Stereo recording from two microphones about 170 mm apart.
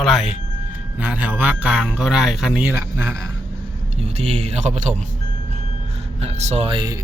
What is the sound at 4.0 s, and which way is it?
Speech, 40° right (ahead or behind).